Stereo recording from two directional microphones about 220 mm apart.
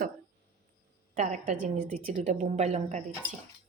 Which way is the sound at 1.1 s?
35° right (ahead or behind).